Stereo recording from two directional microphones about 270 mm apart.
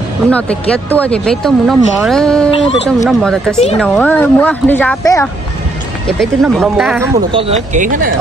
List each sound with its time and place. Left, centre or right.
0.3 s speech: centre
6.4 s speech: centre
7.3 s speech: right